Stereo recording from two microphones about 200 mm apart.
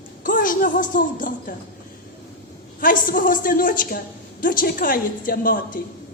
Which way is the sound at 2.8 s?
45° left (ahead or behind).